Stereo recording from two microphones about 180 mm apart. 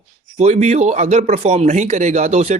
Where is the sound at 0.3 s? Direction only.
40° right (ahead or behind).